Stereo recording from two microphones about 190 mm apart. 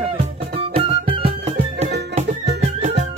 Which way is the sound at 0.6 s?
30° right (ahead or behind).